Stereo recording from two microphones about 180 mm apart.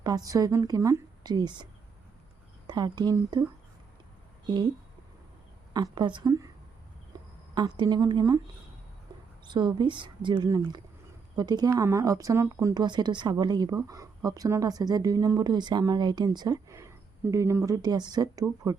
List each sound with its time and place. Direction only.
0.0 s speech: 20° right (ahead or behind)
2.6 s speech: 25° right (ahead or behind)
5.7 s speech: 25° right (ahead or behind)
7.1 s a sound: 20° right (ahead or behind)
7.5 s speech: 25° right (ahead or behind)
9.5 s speech: 25° right (ahead or behind)